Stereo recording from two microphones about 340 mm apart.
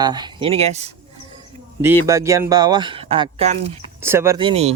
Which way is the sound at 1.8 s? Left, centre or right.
Centre.